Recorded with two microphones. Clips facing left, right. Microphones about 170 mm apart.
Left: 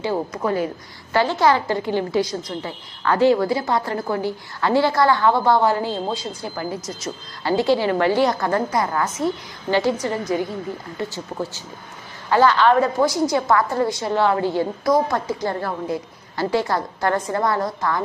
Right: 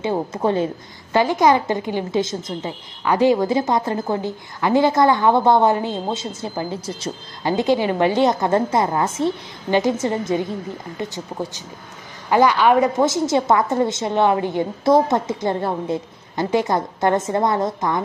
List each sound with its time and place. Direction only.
0.0 s a woman's voice: 25° right (ahead or behind)